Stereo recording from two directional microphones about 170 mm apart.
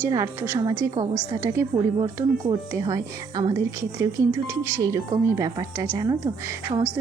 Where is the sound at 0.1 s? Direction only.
20° right (ahead or behind).